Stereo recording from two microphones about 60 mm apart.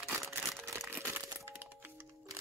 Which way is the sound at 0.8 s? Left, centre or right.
Right.